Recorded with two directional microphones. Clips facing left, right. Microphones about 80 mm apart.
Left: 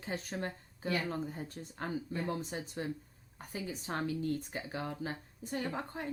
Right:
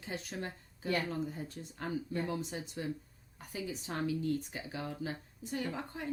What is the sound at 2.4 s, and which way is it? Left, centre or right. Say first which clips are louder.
A woman's voice: left 1 dB; left.